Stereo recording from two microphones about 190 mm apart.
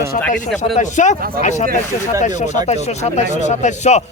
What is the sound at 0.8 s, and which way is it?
A man's voice, 40° left (ahead or behind).